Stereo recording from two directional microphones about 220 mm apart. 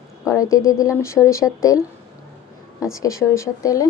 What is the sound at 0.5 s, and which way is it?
Speech, 15° left (ahead or behind).